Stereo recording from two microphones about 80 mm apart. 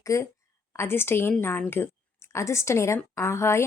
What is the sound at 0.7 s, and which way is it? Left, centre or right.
A woman's voice, left.